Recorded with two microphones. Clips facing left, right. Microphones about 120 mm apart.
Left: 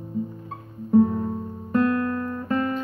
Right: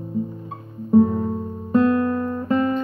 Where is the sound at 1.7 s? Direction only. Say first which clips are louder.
Right 4 dB; 20° right (ahead or behind).